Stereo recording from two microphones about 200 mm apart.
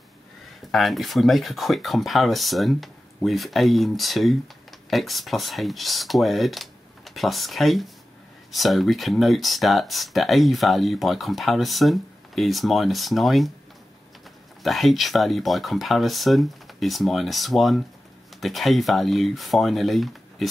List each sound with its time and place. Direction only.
0.7 s speech: centre (ahead or behind)
14.6 s speech: centre (ahead or behind)